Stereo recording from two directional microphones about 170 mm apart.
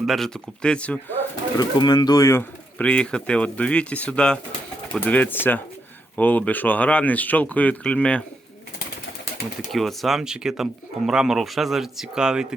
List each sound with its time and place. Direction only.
0.0 s speech: centre (ahead or behind)
1.5 s speech: 25° left (ahead or behind); by 8.2 s 5° left (ahead or behind)
9.7 s speech: centre (ahead or behind)